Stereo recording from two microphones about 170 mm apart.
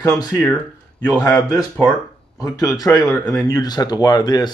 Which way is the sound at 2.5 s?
20° left (ahead or behind).